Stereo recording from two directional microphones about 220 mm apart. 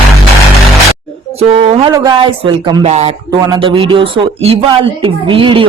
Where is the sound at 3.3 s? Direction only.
20° right (ahead or behind).